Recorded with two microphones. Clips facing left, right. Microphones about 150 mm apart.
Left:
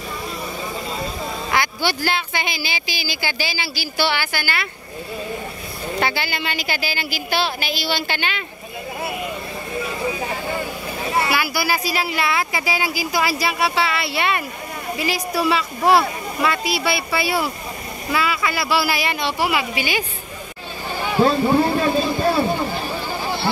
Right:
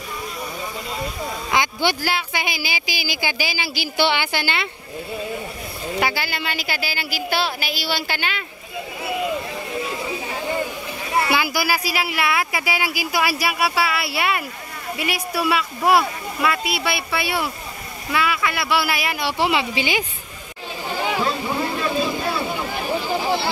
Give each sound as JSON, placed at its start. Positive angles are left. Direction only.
{"t": 1.5, "sound": "a sound", "side_deg": -15}
{"t": 2.0, "sound": "speech", "side_deg": -10}
{"t": 5.9, "sound": "a woman's voice", "side_deg": -5}
{"t": 11.2, "sound": "a woman's voice", "side_deg": -15}
{"t": 19.4, "sound": "a woman's voice", "side_deg": -20}
{"t": 21.7, "sound": "vehicle", "side_deg": 45}